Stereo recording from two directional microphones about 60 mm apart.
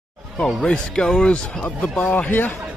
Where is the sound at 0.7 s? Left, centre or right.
Centre; by 2.5 s left.